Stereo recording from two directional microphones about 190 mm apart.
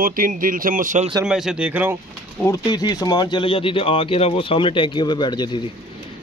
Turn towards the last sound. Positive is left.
turn(degrees=25)  # may be behind; listen again after turning